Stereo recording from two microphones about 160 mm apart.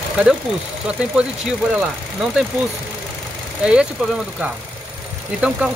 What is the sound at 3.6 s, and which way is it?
Speech, 5° right (ahead or behind).